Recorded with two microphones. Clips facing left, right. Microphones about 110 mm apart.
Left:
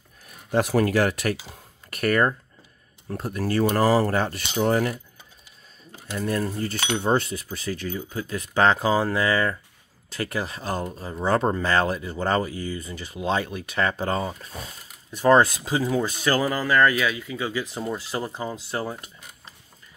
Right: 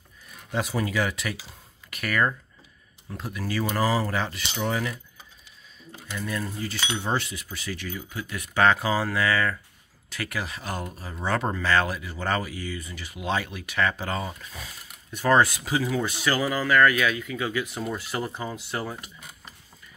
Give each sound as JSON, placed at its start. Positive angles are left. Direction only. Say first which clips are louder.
{"t": 0.5, "sound": "speech", "louder": "left 7 dB", "side_deg": 60}
{"t": 3.7, "sound": "speech", "louder": "left 4 dB", "side_deg": 35}
{"t": 4.0, "sound": "speech", "louder": "left 5 dB", "side_deg": 50}
{"t": 6.0, "sound": "speech", "louder": "left 6 dB", "side_deg": 45}
{"t": 16.6, "sound": "speech", "louder": "right 1 dB", "side_deg": 30}